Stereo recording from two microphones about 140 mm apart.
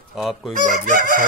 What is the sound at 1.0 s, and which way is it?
Chicken, 85° right.